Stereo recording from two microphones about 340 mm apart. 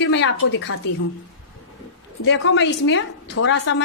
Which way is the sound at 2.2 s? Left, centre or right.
Left.